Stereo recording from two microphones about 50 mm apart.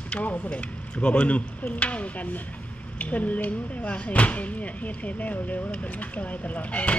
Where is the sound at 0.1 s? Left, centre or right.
Left.